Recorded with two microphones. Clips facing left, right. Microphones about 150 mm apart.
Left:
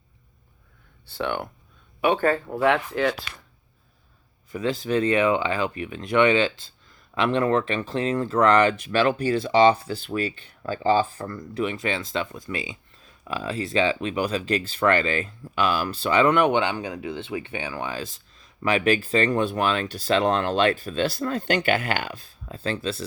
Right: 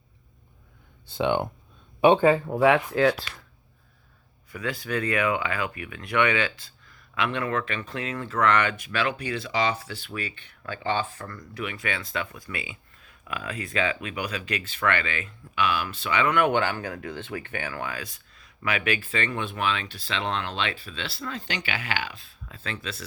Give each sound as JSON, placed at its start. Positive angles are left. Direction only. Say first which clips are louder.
{"t": 1.0, "sound": "speech", "louder": "right 4 dB", "side_deg": -15}
{"t": 2.2, "sound": "speech", "louder": "right 2 dB", "side_deg": -10}
{"t": 4.5, "sound": "speech", "louder": "left 6 dB", "side_deg": 25}
{"t": 16.4, "sound": "speech", "louder": "left 2 dB", "side_deg": 20}
{"t": 18.6, "sound": "speech", "louder": "left 6 dB", "side_deg": 35}